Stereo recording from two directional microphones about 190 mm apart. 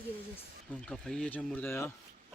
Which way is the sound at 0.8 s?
5° left (ahead or behind).